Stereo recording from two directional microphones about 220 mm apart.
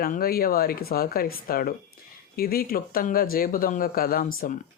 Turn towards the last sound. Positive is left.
turn(degrees=40)  # may be behind; listen again after turning